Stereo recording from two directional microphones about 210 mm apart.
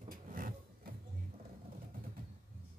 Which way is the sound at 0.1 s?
40° right (ahead or behind).